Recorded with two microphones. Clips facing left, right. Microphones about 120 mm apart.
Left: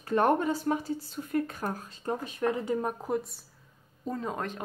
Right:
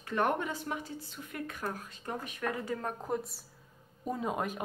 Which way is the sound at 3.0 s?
Centre (ahead or behind).